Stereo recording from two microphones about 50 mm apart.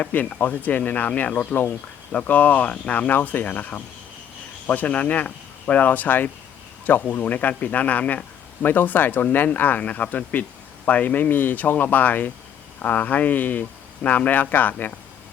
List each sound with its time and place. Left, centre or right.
0.0 s speech: left